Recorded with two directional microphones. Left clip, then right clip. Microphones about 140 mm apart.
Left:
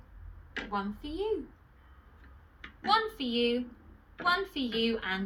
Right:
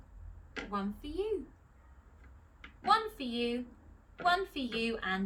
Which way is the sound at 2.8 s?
25° right (ahead or behind).